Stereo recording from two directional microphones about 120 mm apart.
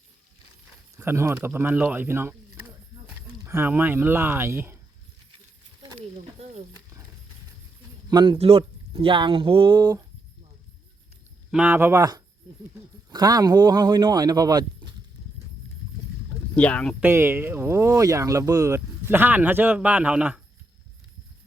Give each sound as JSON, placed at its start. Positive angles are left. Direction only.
{"t": 0.9, "sound": "speech", "side_deg": -25}
{"t": 5.8, "sound": "a sound", "side_deg": -40}
{"t": 8.1, "sound": "speech", "side_deg": -40}
{"t": 8.4, "sound": "speech", "side_deg": -55}
{"t": 11.5, "sound": "speech", "side_deg": -15}
{"t": 13.1, "sound": "speech", "side_deg": -35}
{"t": 16.6, "sound": "speech", "side_deg": 10}
{"t": 17.0, "sound": "speech", "side_deg": -20}